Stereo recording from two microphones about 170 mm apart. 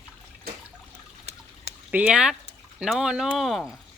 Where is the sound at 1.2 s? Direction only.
40° right (ahead or behind).